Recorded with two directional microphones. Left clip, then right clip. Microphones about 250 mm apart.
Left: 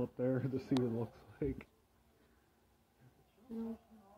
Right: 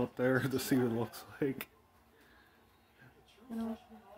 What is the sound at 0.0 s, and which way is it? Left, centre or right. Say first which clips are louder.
Speech: right 5 dB; centre.